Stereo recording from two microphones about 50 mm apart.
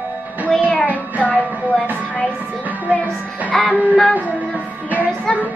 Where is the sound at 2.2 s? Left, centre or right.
Right.